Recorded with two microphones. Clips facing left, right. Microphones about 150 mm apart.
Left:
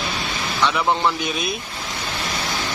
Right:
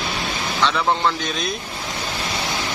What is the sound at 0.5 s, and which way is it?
Speech, 10° left (ahead or behind).